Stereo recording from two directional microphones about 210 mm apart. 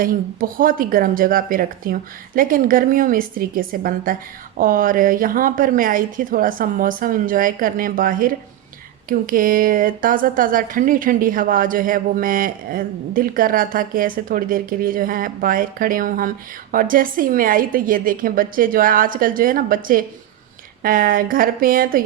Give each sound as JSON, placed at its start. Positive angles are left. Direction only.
{"t": 0.0, "sound": "speech", "side_deg": -40}